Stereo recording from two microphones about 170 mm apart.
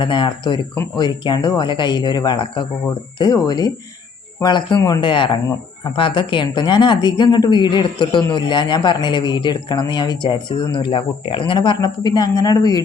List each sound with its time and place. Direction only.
0.0 s speech: 30° left (ahead or behind)